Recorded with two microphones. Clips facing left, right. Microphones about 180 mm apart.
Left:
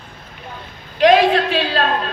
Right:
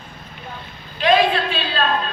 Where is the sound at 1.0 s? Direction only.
75° left (ahead or behind).